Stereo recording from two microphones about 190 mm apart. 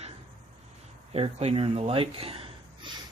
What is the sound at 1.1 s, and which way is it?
Speech, 30° right (ahead or behind).